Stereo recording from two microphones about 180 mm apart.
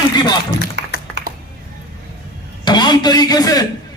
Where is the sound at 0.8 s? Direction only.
70° right (ahead or behind).